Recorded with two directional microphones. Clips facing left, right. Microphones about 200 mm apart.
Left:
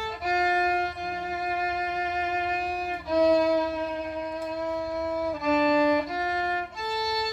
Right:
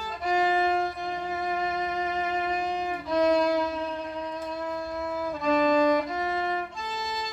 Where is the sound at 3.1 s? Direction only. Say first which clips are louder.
Left 2 dB; 5° left (ahead or behind).